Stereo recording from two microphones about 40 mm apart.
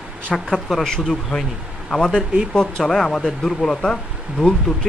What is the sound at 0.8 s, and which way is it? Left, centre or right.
Speech, centre.